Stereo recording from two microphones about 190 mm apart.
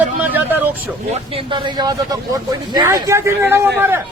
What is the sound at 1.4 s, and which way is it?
Speech, 25° right (ahead or behind).